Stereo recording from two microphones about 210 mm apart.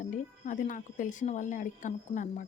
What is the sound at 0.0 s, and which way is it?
Speech, 35° left (ahead or behind).